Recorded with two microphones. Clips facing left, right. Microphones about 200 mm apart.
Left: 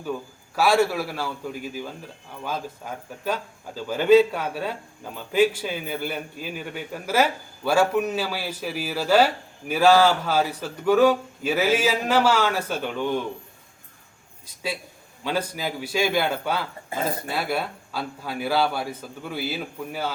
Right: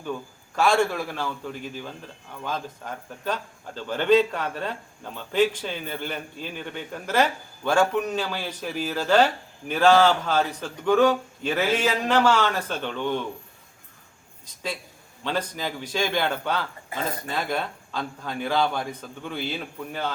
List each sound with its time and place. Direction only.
0.0 s a man's voice: 5° left (ahead or behind)
14.4 s a man's voice: 10° left (ahead or behind)
16.9 s speech: 25° left (ahead or behind)
17.2 s a man's voice: 10° left (ahead or behind)